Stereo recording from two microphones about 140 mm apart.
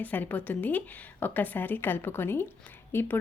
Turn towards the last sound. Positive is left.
turn(degrees=15)  # may be behind; listen again after turning